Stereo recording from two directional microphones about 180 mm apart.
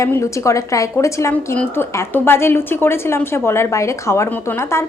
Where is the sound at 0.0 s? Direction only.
15° left (ahead or behind).